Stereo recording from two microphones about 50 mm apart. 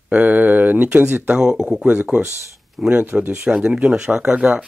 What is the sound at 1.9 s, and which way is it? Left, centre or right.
Speech, right.